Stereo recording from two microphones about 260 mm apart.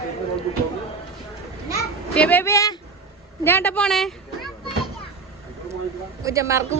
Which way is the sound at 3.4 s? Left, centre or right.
Centre.